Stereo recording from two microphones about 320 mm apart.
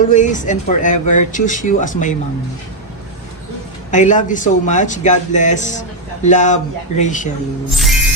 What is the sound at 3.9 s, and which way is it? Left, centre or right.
Speech, left.